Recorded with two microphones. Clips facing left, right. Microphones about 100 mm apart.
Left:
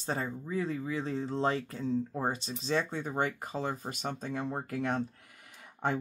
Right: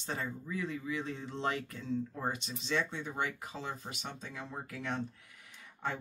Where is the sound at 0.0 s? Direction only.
35° left (ahead or behind).